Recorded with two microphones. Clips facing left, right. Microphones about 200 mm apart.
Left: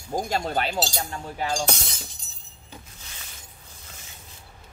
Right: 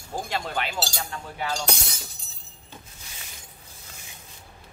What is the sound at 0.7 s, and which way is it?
Speech, 20° left (ahead or behind).